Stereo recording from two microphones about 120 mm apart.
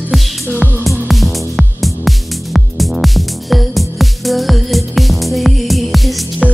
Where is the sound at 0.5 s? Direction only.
15° right (ahead or behind).